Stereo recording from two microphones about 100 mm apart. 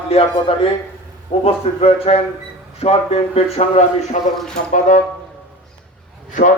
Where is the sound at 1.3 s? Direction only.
90° left.